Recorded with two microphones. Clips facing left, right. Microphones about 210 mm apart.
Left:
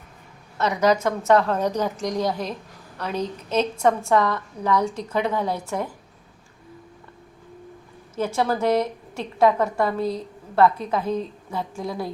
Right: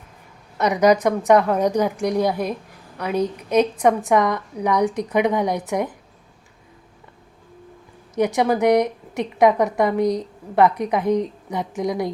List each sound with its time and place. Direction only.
0.6 s a woman's voice: 15° right (ahead or behind)
8.1 s a woman's voice: 15° right (ahead or behind)